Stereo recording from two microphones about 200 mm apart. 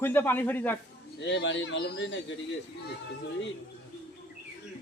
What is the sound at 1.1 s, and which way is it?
A man's voice, 65° left (ahead or behind).